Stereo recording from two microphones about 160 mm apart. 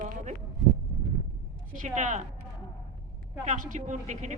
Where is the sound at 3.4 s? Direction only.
55° right (ahead or behind).